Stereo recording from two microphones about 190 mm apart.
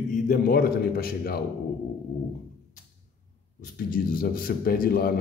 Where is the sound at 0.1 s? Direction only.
50° left (ahead or behind).